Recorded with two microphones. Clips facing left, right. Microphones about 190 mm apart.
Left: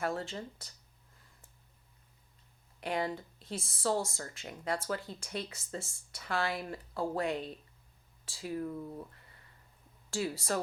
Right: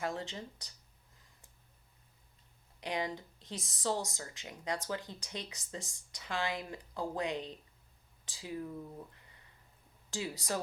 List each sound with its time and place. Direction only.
0.0 s speech: 15° right (ahead or behind)
2.8 s speech: 15° right (ahead or behind)
10.1 s speech: 15° right (ahead or behind)